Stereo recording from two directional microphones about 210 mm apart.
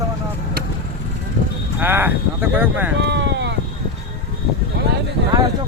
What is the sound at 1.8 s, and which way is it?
Speech, 10° right (ahead or behind).